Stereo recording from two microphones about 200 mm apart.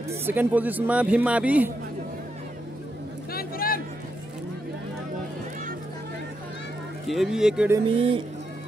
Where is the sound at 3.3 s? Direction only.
50° left (ahead or behind).